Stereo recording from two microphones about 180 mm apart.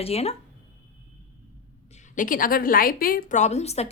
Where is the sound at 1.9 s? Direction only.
45° left (ahead or behind).